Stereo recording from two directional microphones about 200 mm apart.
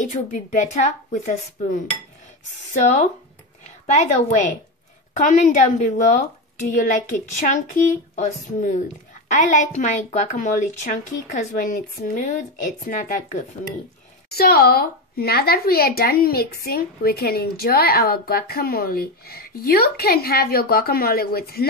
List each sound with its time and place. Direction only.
0.0 s a woman's voice: 40° left (ahead or behind)